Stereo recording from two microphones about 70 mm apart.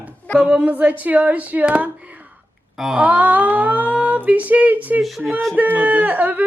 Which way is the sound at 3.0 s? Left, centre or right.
Centre.